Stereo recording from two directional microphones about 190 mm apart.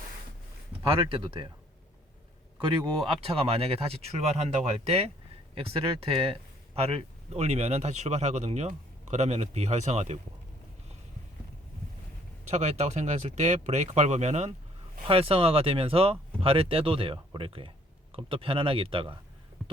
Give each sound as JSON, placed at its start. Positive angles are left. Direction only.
{"t": 1.0, "sound": "speech", "side_deg": -25}
{"t": 3.1, "sound": "speech", "side_deg": -30}
{"t": 12.5, "sound": "speech", "side_deg": -35}